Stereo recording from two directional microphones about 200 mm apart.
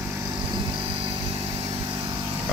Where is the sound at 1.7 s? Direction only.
20° right (ahead or behind).